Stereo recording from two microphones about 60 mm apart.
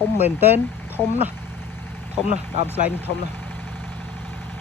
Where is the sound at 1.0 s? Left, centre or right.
Left.